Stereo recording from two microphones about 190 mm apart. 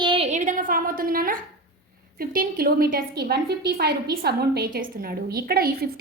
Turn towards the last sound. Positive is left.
turn(degrees=-55)  # may be behind; listen again after turning